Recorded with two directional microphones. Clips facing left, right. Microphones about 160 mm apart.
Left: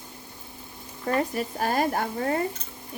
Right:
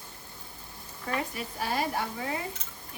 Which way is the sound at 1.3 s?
50° left (ahead or behind).